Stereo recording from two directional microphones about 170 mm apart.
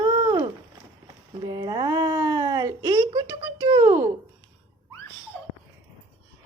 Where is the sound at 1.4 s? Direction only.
25° right (ahead or behind).